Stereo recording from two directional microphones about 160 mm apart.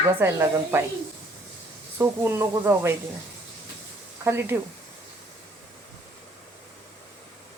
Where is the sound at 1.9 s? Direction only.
15° right (ahead or behind).